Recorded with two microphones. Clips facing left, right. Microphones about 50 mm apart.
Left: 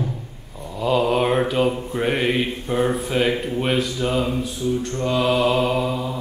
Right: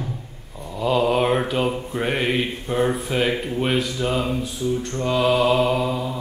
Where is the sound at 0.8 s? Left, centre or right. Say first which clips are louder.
Even; centre.